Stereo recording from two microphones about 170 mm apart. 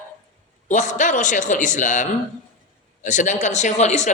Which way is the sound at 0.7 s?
45° left (ahead or behind).